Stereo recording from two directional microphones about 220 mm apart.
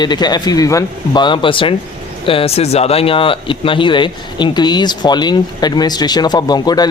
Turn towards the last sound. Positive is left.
turn(degrees=20)  # may be behind; listen again after turning